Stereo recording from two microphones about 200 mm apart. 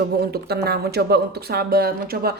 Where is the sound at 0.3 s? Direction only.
50° right (ahead or behind).